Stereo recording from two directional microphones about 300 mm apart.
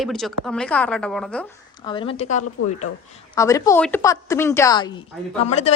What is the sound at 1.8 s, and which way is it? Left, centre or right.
Speech, centre.